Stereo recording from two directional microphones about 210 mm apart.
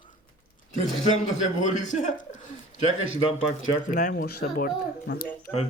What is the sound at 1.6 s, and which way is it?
A man's voice, 35° left (ahead or behind).